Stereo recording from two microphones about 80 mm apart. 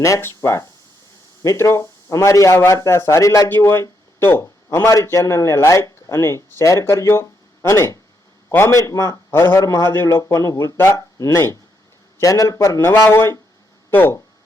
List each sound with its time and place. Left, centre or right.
0.0 s speech: left
3.5 s a man's voice: left
12.9 s speech: left